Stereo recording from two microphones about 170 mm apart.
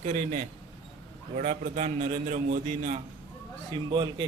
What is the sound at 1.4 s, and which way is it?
A man's voice, 45° right (ahead or behind).